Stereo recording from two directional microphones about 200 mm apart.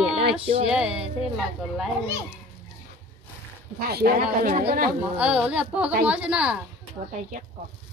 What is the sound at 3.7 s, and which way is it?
Speech, 50° right (ahead or behind).